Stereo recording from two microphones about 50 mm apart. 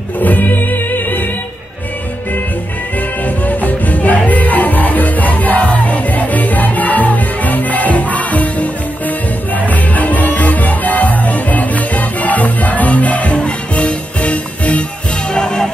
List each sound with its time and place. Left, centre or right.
0.2 s music: left
3.3 s music: left
15.3 s music: centre